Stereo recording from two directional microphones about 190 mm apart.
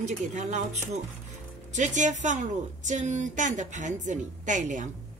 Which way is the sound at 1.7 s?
40° right (ahead or behind).